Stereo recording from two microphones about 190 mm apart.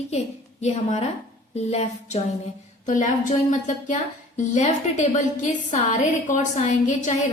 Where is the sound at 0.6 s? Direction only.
35° left (ahead or behind).